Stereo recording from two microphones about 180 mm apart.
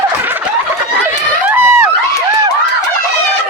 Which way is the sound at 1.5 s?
15° right (ahead or behind).